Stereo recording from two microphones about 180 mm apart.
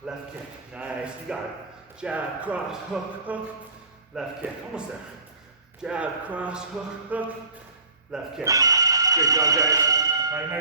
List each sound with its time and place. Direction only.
0.7 s speech: 5° right (ahead or behind)
8.4 s speech: 20° right (ahead or behind)